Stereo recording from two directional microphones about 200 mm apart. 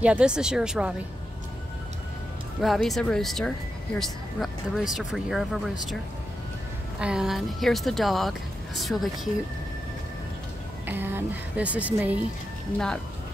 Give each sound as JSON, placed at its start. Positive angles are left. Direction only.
{"t": 0.0, "sound": "speech", "side_deg": -5}
{"t": 2.6, "sound": "speech", "side_deg": 0}
{"t": 7.0, "sound": "speech", "side_deg": -5}
{"t": 10.9, "sound": "speech", "side_deg": -10}
{"t": 12.7, "sound": "speech", "side_deg": 5}